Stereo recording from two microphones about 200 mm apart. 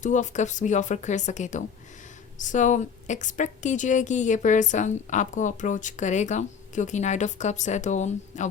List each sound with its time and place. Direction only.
0.0 s a woman's voice: 40° left (ahead or behind)